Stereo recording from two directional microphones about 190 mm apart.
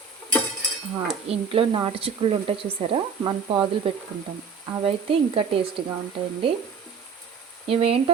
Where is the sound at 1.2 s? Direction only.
30° right (ahead or behind).